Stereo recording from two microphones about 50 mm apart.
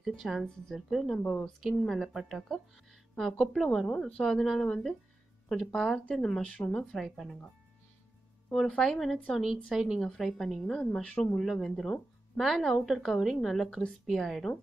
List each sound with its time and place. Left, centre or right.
0.0 s speech: centre
1.2 s a woman's voice: left
1.8 s a woman's voice: centre
7.0 s speech: centre
8.5 s a woman's voice: centre
10.0 s a woman's voice: centre